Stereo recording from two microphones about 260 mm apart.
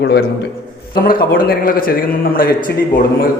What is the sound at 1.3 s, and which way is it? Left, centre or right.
A man's voice, left.